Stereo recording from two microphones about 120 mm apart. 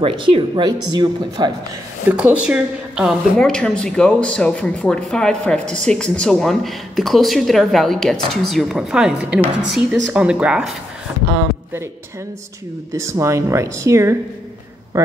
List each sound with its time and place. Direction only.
0.0 s speech: 40° right (ahead or behind)
2.0 s a woman's voice: 10° right (ahead or behind)
3.3 s speech: 5° left (ahead or behind)
12.9 s speech: 25° right (ahead or behind)